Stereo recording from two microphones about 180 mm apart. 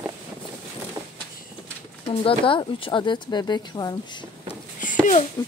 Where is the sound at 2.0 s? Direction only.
30° left (ahead or behind).